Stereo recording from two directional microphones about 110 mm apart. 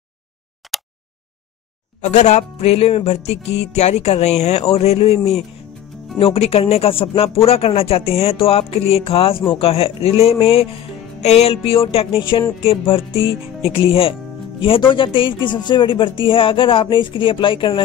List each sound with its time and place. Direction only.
0.6 s a sound: centre (ahead or behind)
2.0 s music: 90° left; by 14.1 s 55° left (ahead or behind)
14.6 s speech: 50° left (ahead or behind)